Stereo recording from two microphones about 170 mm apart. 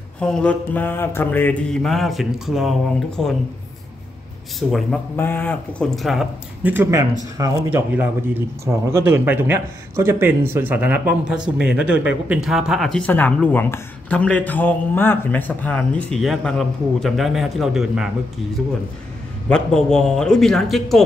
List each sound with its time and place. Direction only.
0.2 s mantra: 5° left (ahead or behind)
4.6 s mantra: centre (ahead or behind)
5.1 s mantra: 10° left (ahead or behind); by 7.1 s 15° right (ahead or behind)
7.4 s speech: 20° right (ahead or behind)
11.7 s mantra: 5° right (ahead or behind)
12.3 s speech: centre (ahead or behind)
19.5 s mantra: 5° left (ahead or behind)